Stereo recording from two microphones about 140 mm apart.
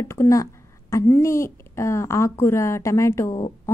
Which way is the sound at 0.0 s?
20° left (ahead or behind).